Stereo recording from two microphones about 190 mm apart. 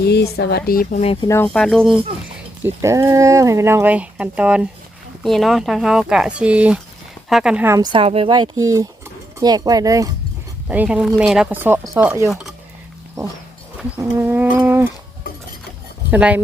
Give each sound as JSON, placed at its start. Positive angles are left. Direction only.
{"t": 0.1, "sound": "speech", "side_deg": 60}
{"t": 1.5, "sound": "speech", "side_deg": 0}
{"t": 2.6, "sound": "speech", "side_deg": -15}
{"t": 7.8, "sound": "speech", "side_deg": -30}
{"t": 10.7, "sound": "speech", "side_deg": -5}
{"t": 12.3, "sound": "speech", "side_deg": 0}
{"t": 14.0, "sound": "speech", "side_deg": -10}
{"t": 16.1, "sound": "speech", "side_deg": -10}